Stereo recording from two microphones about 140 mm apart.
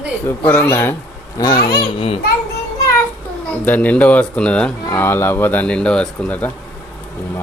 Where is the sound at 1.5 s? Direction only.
90° left.